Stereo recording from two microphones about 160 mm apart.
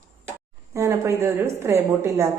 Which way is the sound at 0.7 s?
20° right (ahead or behind).